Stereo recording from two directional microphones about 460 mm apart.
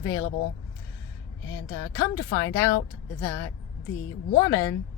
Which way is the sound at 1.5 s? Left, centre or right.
Left.